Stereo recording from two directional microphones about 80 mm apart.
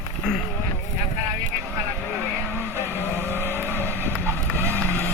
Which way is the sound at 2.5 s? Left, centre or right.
Right.